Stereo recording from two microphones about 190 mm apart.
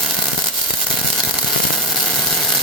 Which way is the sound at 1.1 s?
Centre (ahead or behind).